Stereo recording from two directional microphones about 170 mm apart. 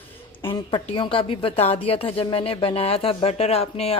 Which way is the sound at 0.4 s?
30° left (ahead or behind).